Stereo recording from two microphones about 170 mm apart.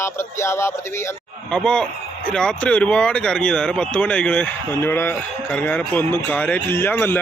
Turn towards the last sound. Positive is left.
turn(degrees=10)  # may be behind; listen again after turning